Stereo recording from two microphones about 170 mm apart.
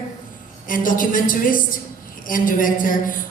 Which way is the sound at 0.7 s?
50° left (ahead or behind).